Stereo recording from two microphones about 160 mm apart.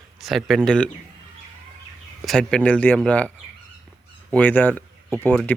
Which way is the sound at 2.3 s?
5° left (ahead or behind).